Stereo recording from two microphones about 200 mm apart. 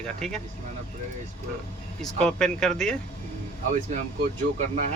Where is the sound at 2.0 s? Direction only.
5° left (ahead or behind).